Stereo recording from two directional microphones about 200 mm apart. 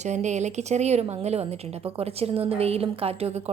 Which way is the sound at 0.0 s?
35° right (ahead or behind).